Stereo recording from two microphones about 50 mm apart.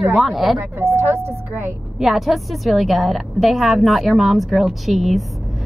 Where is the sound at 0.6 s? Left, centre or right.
Right.